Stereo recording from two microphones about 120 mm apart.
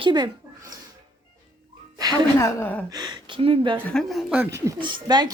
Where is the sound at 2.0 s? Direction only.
35° right (ahead or behind).